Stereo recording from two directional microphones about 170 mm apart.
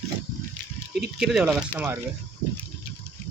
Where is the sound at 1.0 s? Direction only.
5° right (ahead or behind).